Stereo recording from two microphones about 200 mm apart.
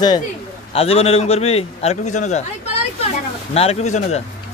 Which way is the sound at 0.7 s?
30° left (ahead or behind).